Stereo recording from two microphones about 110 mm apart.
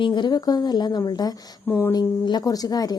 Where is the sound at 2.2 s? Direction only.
40° left (ahead or behind).